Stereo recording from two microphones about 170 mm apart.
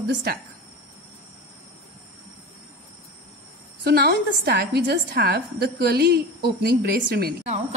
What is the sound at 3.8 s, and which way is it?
A woman's voice, 65° right (ahead or behind).